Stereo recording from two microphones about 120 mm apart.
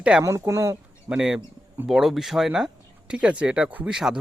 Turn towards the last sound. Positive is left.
turn(degrees=-5)  # may be behind; listen again after turning